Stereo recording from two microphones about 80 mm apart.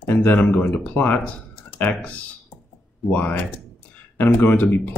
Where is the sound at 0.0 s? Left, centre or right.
Left.